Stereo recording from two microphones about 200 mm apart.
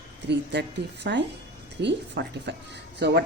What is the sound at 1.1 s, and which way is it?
A woman's voice, 60° right (ahead or behind).